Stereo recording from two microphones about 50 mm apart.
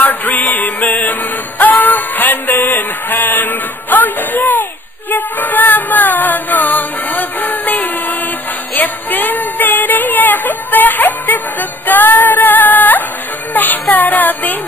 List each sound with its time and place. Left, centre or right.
0.1 s music: left
8.7 s a sound: left
13.5 s child singing: left